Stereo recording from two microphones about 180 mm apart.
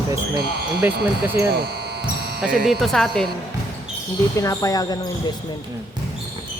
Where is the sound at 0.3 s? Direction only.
60° right (ahead or behind).